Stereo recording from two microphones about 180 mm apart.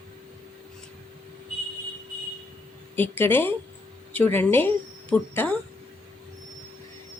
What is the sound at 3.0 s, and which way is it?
Speech, 10° left (ahead or behind).